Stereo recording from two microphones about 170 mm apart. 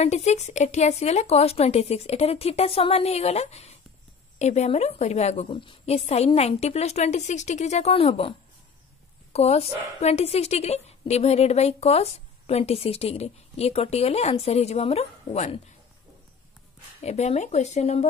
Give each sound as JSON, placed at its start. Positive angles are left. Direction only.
{"t": 0.0, "sound": "a woman's voice", "side_deg": 40}
{"t": 17.0, "sound": "a woman's voice", "side_deg": 40}